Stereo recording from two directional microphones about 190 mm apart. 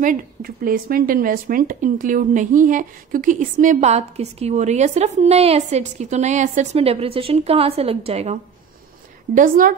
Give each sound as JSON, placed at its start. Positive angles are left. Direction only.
{"t": 0.0, "sound": "speech", "side_deg": -45}
{"t": 9.3, "sound": "a woman's voice", "side_deg": -45}